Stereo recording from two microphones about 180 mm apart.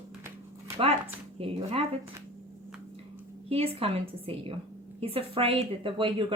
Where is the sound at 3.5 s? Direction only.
35° right (ahead or behind).